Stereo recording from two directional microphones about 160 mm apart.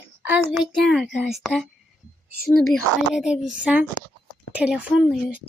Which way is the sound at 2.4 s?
Centre (ahead or behind).